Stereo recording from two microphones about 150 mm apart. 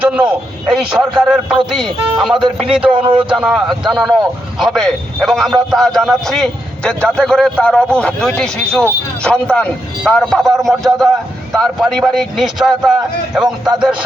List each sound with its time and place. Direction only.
0.0 s a man's voice: 10° right (ahead or behind)
2.3 s speech: 35° right (ahead or behind)
2.6 s a man's voice: 5° right (ahead or behind)
2.9 s speech: 35° right (ahead or behind)
3.3 s a man's voice: centre (ahead or behind)